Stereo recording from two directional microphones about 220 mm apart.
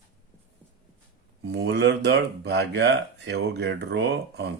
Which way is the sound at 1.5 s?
50° right (ahead or behind).